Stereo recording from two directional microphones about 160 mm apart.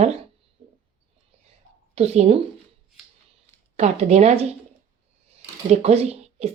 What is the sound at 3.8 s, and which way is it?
Speech, 45° right (ahead or behind).